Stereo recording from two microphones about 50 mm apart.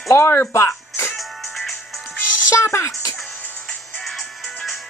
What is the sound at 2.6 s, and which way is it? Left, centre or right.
Speech, left.